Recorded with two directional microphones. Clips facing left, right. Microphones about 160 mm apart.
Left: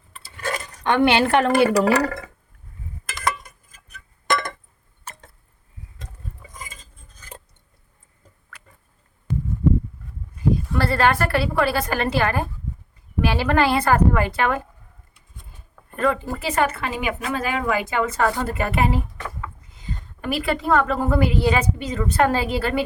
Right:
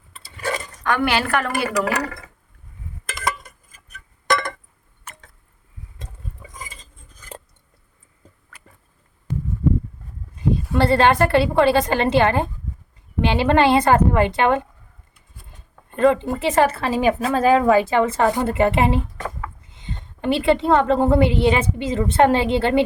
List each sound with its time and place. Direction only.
0.1 s dishes: 5° right (ahead or behind)
0.9 s speech: 25° left (ahead or behind)
5.1 s a sound: 35° left (ahead or behind)
10.3 s a woman's voice: 25° right (ahead or behind)
15.9 s a woman's voice: 25° right (ahead or behind)